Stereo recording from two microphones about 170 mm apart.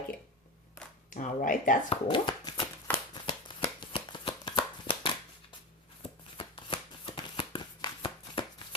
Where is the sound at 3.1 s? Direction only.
30° left (ahead or behind).